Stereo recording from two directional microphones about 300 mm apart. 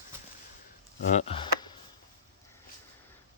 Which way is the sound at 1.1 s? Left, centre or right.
Centre.